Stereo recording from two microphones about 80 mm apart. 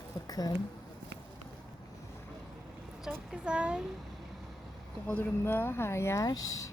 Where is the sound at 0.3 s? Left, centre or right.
Left.